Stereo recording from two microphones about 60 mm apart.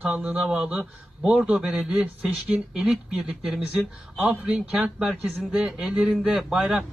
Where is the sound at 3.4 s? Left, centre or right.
Centre.